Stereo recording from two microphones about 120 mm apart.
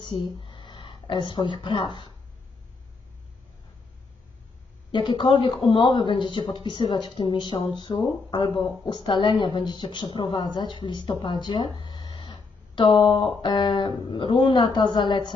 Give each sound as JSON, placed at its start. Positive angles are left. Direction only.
{"t": 0.0, "sound": "a woman's voice", "side_deg": 40}
{"t": 4.9, "sound": "speech", "side_deg": 40}